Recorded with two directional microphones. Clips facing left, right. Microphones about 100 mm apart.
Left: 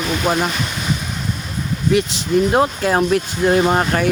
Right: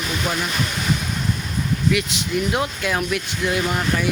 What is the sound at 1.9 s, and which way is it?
Speech, 35° left (ahead or behind).